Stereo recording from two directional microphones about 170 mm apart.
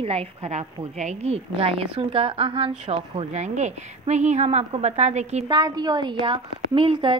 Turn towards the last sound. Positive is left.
turn(degrees=-30)  # may be behind; listen again after turning